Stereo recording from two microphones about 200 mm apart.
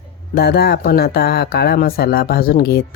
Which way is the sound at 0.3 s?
55° left (ahead or behind).